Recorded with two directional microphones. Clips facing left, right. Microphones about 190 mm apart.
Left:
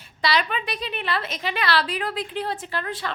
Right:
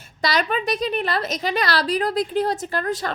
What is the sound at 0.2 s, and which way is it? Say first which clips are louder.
A woman's voice: right 2 dB; 45° right (ahead or behind).